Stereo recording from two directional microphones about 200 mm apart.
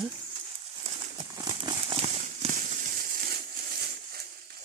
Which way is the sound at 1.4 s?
20° right (ahead or behind).